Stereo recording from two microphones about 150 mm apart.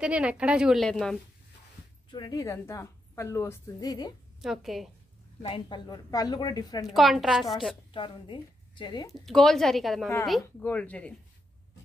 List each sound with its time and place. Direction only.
0.0 s a woman's voice: 10° right (ahead or behind)
2.0 s a woman's voice: 30° left (ahead or behind)
4.4 s speech: centre (ahead or behind)
5.5 s a woman's voice: 30° left (ahead or behind)
6.9 s speech: centre (ahead or behind)
7.9 s a woman's voice: 35° left (ahead or behind)
9.1 s speech: centre (ahead or behind)